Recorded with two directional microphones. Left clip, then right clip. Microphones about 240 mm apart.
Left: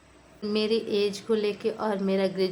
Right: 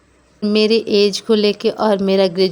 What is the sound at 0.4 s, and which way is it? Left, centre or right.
Speech, right.